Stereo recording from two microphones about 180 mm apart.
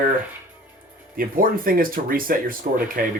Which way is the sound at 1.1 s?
50° right (ahead or behind).